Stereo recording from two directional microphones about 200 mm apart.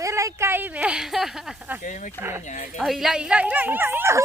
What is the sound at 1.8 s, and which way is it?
Speech, 40° left (ahead or behind).